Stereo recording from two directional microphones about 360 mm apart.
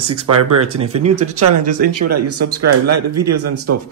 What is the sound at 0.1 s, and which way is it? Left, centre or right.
Speech, right.